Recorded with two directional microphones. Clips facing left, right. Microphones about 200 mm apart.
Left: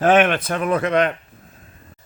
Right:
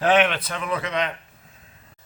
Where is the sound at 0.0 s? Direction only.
50° left (ahead or behind).